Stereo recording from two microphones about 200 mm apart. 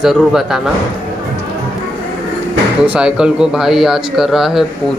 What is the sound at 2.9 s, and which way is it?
Speech, 5° right (ahead or behind).